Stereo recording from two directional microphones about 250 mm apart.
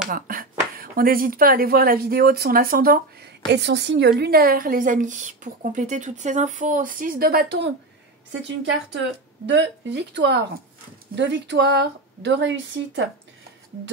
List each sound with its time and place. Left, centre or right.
0.1 s a woman's voice: right